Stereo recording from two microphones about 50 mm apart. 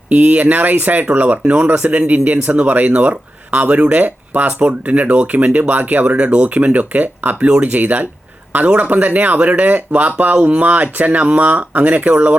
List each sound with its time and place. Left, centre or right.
0.1 s speech: right